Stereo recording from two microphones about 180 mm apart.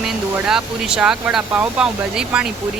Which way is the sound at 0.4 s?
5° right (ahead or behind).